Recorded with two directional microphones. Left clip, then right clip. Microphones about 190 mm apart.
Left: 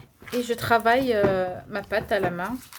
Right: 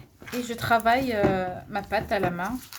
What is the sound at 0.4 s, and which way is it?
Speech, 35° left (ahead or behind).